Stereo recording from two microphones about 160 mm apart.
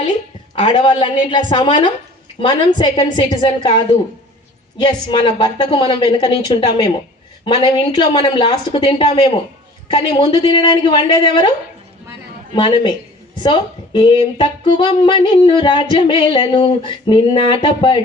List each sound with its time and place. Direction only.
0.5 s speech: 30° left (ahead or behind)
2.4 s singing: 30° left (ahead or behind)
4.8 s singing: 30° left (ahead or behind)
7.4 s speech: 30° left (ahead or behind)
9.9 s singing: 30° left (ahead or behind)
12.5 s singing: 30° left (ahead or behind)